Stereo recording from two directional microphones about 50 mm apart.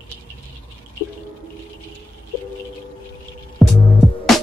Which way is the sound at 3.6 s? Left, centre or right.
Centre.